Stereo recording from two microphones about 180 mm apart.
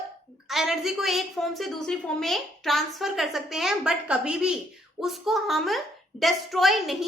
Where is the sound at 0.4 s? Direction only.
Centre (ahead or behind).